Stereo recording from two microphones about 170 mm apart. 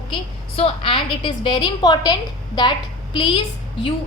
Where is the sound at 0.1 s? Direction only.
35° left (ahead or behind).